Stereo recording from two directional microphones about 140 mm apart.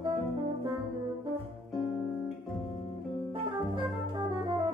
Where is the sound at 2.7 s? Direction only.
40° left (ahead or behind).